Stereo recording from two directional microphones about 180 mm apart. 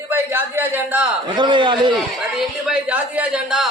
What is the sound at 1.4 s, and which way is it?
Speech, 25° right (ahead or behind).